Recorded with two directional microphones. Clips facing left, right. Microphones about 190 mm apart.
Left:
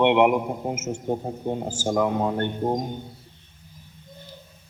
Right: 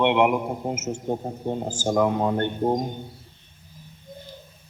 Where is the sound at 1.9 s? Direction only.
30° right (ahead or behind).